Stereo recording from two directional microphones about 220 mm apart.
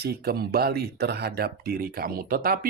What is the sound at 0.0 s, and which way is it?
Speech, 45° right (ahead or behind).